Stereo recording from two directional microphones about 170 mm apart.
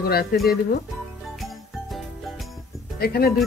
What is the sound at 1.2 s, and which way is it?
Music, centre (ahead or behind).